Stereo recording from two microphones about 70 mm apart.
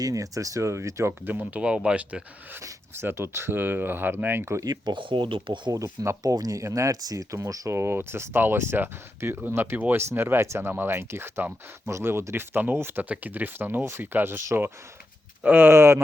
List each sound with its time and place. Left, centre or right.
0.0 s speech: right
1.2 s speech: right
2.6 s speech: right
4.6 s speech: right
6.2 s speech: right
7.3 s speech: right